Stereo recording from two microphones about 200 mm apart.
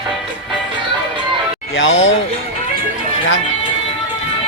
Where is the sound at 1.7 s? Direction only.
70° left (ahead or behind).